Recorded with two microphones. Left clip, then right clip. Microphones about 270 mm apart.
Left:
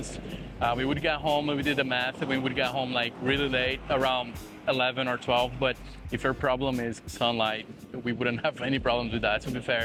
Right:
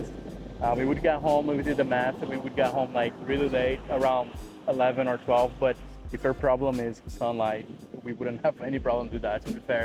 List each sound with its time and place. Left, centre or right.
0.6 s speech: left